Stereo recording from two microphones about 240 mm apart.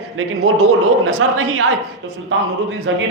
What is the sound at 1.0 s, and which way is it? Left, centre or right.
Speech, right.